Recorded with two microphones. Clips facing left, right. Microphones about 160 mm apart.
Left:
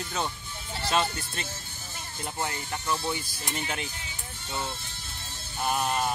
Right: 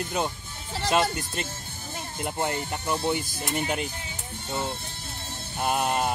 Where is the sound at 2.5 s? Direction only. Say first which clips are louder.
Right 3 dB; 50° right (ahead or behind).